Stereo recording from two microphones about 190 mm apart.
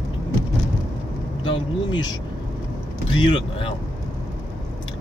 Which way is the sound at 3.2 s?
25° left (ahead or behind).